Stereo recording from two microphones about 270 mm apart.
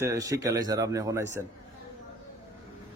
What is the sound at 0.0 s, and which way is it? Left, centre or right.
A man's voice, centre.